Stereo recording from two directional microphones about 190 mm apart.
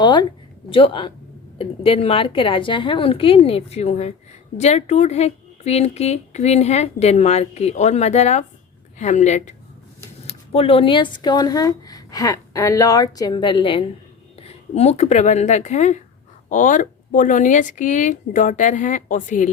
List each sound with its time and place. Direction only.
0.0 s speech: 25° left (ahead or behind); by 19.5 s 40° left (ahead or behind)